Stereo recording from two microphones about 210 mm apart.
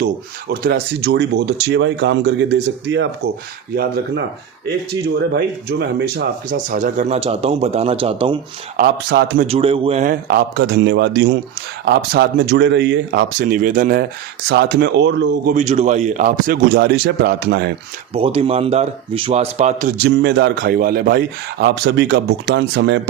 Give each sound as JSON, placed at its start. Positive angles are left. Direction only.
{"t": 0.5, "sound": "speech", "side_deg": -50}
{"t": 6.1, "sound": "speech", "side_deg": -40}
{"t": 8.7, "sound": "a man's voice", "side_deg": -45}
{"t": 9.5, "sound": "a man's voice", "side_deg": -25}
{"t": 14.4, "sound": "speech", "side_deg": -50}
{"t": 15.5, "sound": "a man's voice", "side_deg": -30}
{"t": 18.1, "sound": "speech", "side_deg": -25}
{"t": 20.0, "sound": "a man's voice", "side_deg": -55}